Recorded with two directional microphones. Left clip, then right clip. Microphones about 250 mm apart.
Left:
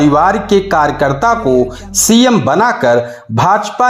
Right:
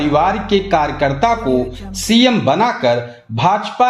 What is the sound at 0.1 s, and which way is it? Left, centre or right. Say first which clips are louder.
Speech: left 4 dB; left.